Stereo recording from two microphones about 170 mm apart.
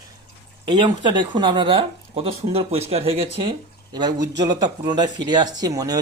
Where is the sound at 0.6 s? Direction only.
25° right (ahead or behind).